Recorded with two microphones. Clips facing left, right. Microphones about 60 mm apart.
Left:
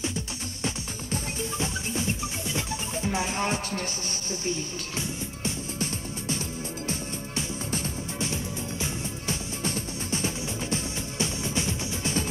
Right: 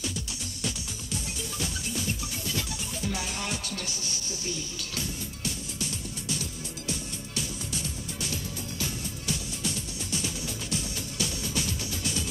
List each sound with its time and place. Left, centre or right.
0.7 s music: left